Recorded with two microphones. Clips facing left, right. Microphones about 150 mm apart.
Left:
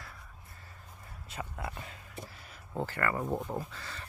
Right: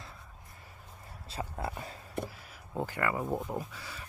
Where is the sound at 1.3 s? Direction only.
30° right (ahead or behind).